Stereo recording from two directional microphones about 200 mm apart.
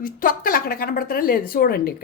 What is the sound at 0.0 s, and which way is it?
A woman's voice, 45° left (ahead or behind).